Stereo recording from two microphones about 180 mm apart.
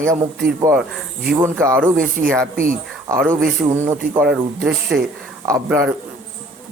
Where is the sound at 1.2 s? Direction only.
5° right (ahead or behind).